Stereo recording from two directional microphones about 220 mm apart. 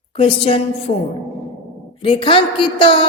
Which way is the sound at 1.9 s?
25° left (ahead or behind).